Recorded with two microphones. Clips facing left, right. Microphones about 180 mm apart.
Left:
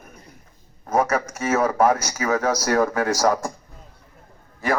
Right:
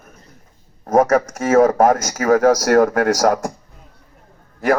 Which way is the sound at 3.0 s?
70° right (ahead or behind).